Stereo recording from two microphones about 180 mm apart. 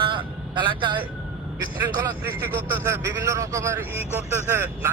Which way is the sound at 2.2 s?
10° right (ahead or behind).